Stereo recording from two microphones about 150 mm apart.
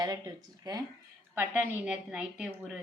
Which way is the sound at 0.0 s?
25° right (ahead or behind).